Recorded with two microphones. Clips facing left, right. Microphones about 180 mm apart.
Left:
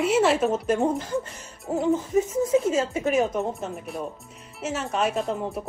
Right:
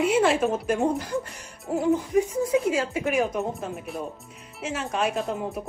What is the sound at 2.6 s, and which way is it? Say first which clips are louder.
Speech: left 1 dB; 25° left (ahead or behind).